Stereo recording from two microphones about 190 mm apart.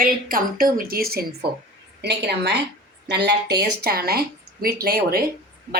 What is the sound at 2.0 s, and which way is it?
Speech, 65° right (ahead or behind).